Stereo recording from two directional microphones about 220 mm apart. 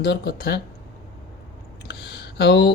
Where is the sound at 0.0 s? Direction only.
45° left (ahead or behind).